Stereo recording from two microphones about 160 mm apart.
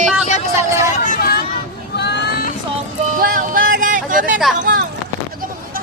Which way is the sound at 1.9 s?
90° left.